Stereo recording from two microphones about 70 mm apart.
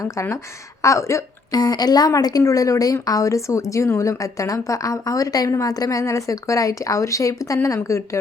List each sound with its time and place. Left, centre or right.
0.0 s a woman's voice: left
1.5 s a woman's voice: left